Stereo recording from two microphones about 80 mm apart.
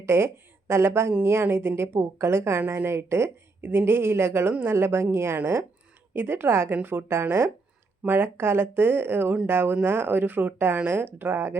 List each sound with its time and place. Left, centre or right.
0.0 s a woman's voice: right